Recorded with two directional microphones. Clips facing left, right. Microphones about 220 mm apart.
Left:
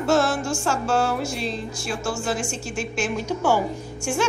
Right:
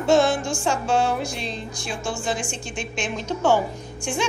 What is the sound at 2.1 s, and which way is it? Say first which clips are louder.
Speech: left 1 dB; 40° left (ahead or behind).